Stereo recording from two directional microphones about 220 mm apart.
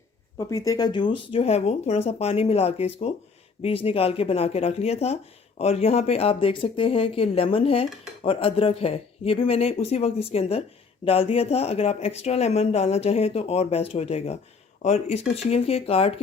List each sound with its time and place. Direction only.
0.3 s speech: 15° left (ahead or behind)